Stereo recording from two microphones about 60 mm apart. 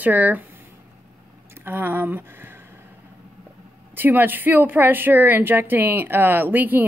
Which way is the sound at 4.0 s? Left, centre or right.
Right.